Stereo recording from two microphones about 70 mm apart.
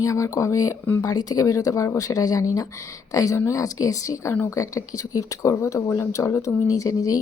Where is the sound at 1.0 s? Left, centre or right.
Left.